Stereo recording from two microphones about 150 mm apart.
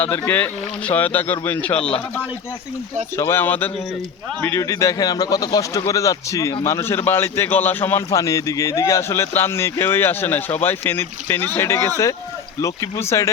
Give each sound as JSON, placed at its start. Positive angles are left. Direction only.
{"t": 0.0, "sound": "a man's voice", "side_deg": 15}
{"t": 3.2, "sound": "a man's voice", "side_deg": 15}